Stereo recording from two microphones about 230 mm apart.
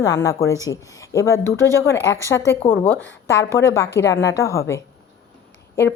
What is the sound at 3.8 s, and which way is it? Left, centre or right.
Speech, left.